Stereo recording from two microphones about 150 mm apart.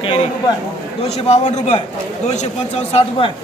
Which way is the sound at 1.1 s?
45° left (ahead or behind).